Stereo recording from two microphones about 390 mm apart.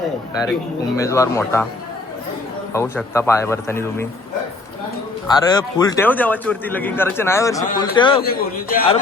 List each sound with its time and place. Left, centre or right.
0.9 s speech: centre
2.7 s speech: centre
5.4 s a man's voice: centre